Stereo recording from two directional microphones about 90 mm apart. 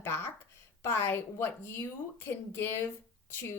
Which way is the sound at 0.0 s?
25° left (ahead or behind).